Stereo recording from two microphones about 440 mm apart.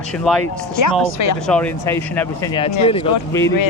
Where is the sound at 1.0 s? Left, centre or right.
Left.